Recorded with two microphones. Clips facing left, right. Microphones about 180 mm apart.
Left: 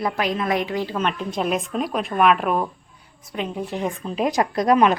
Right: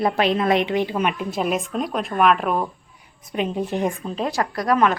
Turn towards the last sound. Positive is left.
turn(degrees=20)  # may be behind; listen again after turning